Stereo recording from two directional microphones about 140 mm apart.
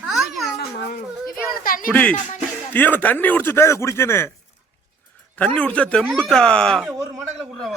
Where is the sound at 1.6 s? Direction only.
85° left.